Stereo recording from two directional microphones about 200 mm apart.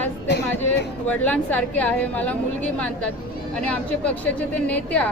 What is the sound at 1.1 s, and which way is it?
Speech, 5° left (ahead or behind).